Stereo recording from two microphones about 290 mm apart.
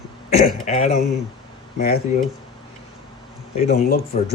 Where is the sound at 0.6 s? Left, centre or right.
Left.